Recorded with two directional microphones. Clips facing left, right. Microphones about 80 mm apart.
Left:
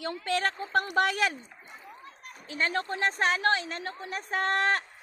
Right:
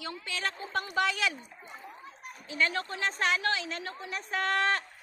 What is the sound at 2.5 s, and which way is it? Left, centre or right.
A woman's voice, left.